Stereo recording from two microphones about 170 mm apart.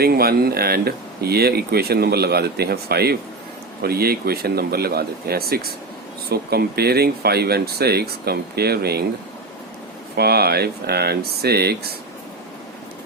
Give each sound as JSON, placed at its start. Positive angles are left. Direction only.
{"t": 0.0, "sound": "speech", "side_deg": -65}
{"t": 10.2, "sound": "speech", "side_deg": -70}